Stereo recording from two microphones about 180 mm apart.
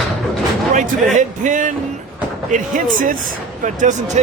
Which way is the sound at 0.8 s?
45° right (ahead or behind).